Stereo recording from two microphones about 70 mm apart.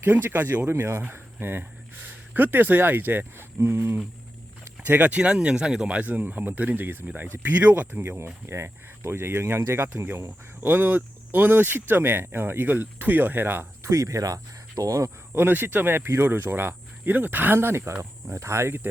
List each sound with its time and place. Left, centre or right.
0.0 s speech: right
0.7 s speech: right
4.9 s speech: right
10.7 s speech: right
13.9 s speech: right
15.3 s speech: right